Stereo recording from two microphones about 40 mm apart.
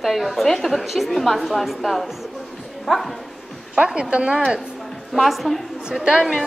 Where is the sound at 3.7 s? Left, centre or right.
Right.